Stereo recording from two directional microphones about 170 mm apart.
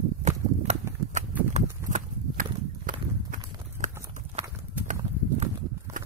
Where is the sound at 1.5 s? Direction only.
45° right (ahead or behind).